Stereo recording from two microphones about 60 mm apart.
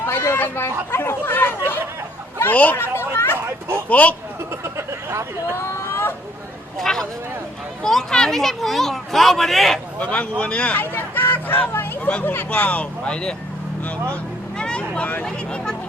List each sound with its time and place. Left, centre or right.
0.0 s speech: left
2.7 s children playing: left
3.8 s speech: left
4.6 s speech: right
5.5 s a sound: left
6.7 s speech: centre
10.0 s speech: left
10.8 s speech: left
12.5 s speech: left
14.6 s vehicle: centre
15.2 s speech: centre